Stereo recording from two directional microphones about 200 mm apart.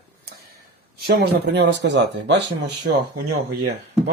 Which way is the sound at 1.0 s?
55° right (ahead or behind).